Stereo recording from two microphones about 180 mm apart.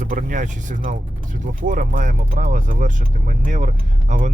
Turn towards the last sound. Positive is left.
turn(degrees=-40)  # may be behind; listen again after turning